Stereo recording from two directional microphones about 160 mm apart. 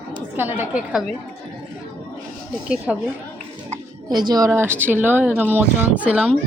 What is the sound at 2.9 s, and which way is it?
Speech, centre (ahead or behind).